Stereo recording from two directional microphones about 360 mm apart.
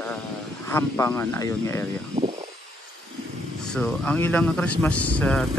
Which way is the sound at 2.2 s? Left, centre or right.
Centre.